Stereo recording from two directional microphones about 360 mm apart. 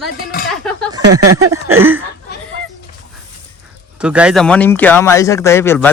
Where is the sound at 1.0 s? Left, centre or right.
Right.